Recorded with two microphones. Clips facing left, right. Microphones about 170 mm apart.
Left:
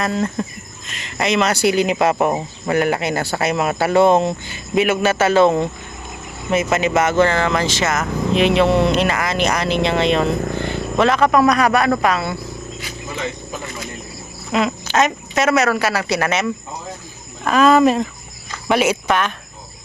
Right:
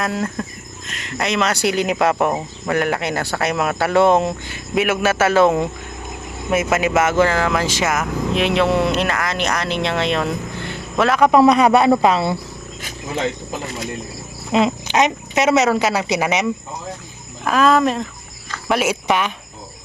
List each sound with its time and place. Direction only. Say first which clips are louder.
0.0 s speech: left 2 dB; 5° right (ahead or behind)
11.3 s speech: right 3 dB; 25° right (ahead or behind)
14.5 s cricket: right 2 dB; 25° right (ahead or behind)
14.9 s speech: even; 20° right (ahead or behind)
17.4 s speech: left 3 dB; centre (ahead or behind)